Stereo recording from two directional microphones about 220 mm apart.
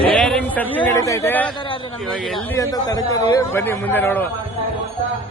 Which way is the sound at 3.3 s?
10° left (ahead or behind).